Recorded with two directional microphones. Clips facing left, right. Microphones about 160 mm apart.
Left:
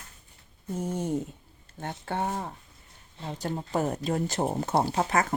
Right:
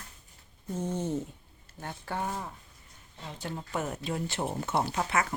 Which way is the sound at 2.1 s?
35° left (ahead or behind).